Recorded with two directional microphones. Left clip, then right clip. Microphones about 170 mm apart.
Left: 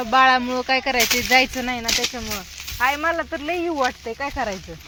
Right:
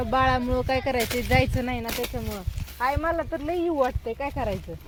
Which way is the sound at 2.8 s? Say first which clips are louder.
Left 5 dB; 20° left (ahead or behind).